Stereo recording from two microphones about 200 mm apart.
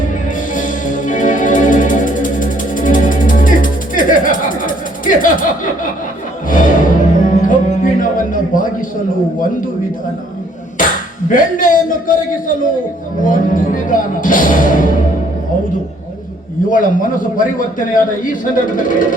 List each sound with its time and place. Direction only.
0.0 s music: 40° left (ahead or behind)
11.3 s a sound: 40° left (ahead or behind)
13.2 s music: 40° left (ahead or behind)
16.6 s a man's voice: 40° left (ahead or behind)